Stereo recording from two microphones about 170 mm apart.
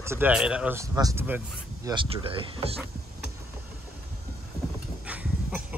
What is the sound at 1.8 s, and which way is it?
Speech, 30° right (ahead or behind).